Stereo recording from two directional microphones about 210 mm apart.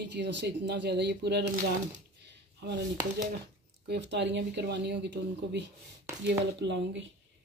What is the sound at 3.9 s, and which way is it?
Speech, 55° right (ahead or behind).